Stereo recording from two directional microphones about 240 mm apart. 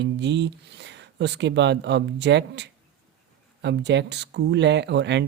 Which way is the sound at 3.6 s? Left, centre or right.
Right.